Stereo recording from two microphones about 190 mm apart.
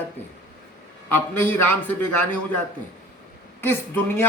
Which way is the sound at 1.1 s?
10° left (ahead or behind).